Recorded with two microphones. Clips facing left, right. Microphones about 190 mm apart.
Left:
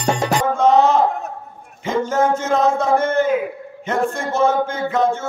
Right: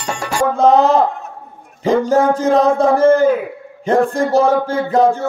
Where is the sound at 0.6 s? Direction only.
35° right (ahead or behind).